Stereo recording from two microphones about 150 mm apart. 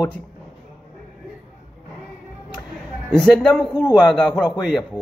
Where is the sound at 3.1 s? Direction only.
5° left (ahead or behind).